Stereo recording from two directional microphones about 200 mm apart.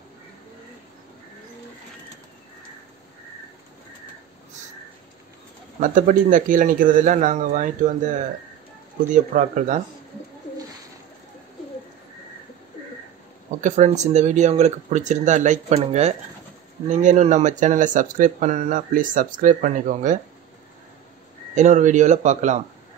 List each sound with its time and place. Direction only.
5.8 s speech: 40° right (ahead or behind)
9.1 s speech: 40° right (ahead or behind)
13.6 s speech: 35° right (ahead or behind)
21.5 s speech: 35° right (ahead or behind)